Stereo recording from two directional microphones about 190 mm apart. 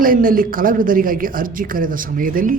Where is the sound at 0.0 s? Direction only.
45° right (ahead or behind).